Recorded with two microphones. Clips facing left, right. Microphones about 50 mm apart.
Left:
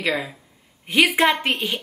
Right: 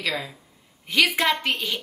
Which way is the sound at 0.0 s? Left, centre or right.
Left.